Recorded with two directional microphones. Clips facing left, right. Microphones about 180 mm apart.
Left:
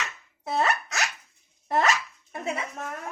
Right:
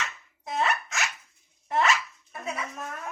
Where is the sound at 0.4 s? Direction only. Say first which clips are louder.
Left 2 dB; 35° left (ahead or behind).